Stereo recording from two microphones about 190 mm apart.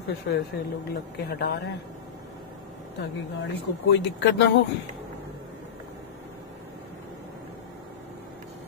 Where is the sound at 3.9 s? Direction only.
70° left (ahead or behind).